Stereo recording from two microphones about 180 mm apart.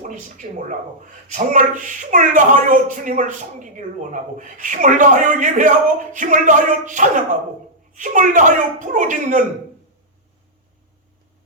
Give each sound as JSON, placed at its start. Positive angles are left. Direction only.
{"t": 0.4, "sound": "speech", "side_deg": -40}